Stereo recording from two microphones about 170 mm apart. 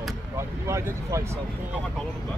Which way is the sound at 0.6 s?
15° right (ahead or behind).